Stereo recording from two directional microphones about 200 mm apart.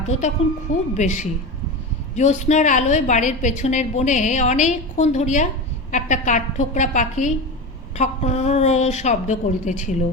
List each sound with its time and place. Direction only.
0.4 s a woman's voice: 30° left (ahead or behind)